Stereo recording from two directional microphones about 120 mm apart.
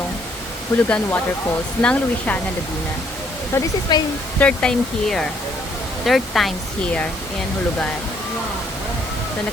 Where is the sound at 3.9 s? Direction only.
35° left (ahead or behind).